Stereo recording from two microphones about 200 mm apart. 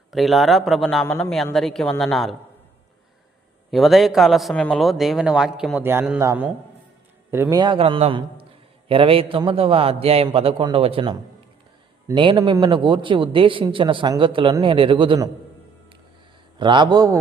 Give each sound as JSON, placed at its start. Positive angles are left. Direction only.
{"t": 0.1, "sound": "a man's voice", "side_deg": 0}
{"t": 3.7, "sound": "a man's voice", "side_deg": 0}
{"t": 16.6, "sound": "a man's voice", "side_deg": -25}